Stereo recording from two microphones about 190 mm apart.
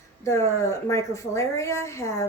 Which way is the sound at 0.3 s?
15° left (ahead or behind).